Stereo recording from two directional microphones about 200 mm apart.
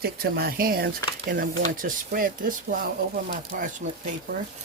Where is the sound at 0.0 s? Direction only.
50° right (ahead or behind).